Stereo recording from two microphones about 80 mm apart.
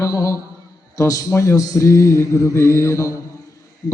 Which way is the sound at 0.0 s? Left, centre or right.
Left.